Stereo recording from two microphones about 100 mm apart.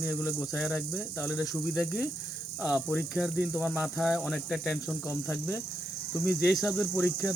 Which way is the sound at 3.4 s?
15° right (ahead or behind).